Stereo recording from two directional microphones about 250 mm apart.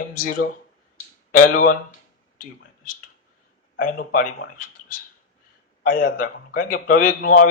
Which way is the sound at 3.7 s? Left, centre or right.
Left.